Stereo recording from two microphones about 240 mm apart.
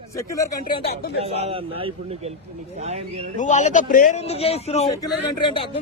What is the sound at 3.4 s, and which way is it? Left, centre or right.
A man's voice, left.